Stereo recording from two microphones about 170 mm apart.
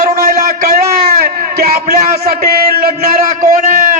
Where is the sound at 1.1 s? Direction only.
65° right (ahead or behind).